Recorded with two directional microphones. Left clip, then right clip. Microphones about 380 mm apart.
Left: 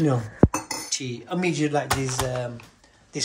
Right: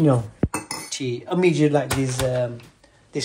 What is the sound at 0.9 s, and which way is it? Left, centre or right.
Speech, centre.